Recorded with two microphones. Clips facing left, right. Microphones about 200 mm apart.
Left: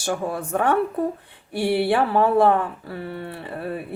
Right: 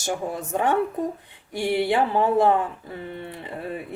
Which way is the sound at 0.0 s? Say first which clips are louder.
Left 2 dB; 15° right (ahead or behind).